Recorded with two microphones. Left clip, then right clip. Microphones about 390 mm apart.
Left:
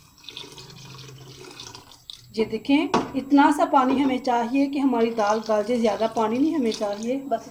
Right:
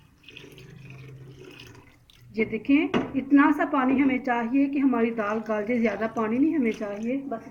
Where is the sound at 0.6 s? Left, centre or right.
Left.